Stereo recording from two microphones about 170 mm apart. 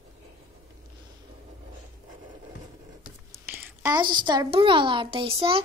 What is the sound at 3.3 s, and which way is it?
Whispering, 15° right (ahead or behind).